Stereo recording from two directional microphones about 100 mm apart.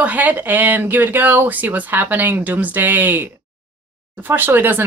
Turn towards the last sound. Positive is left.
turn(degrees=-20)  # may be behind; listen again after turning